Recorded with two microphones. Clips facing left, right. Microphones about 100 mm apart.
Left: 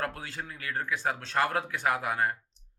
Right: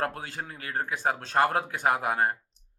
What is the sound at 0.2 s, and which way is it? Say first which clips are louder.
Speech: right 2 dB; 45° right (ahead or behind).